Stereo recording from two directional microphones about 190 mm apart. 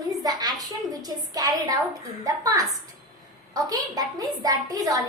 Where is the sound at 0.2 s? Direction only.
20° right (ahead or behind).